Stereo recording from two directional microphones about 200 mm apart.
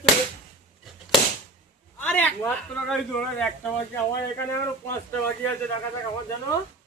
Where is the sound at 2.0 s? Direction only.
10° left (ahead or behind).